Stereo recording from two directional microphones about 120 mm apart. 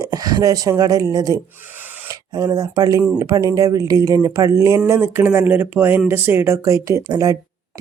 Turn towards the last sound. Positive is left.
turn(degrees=-30)  # may be behind; listen again after turning